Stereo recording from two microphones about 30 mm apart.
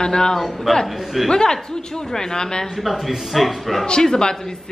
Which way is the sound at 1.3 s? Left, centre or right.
Left.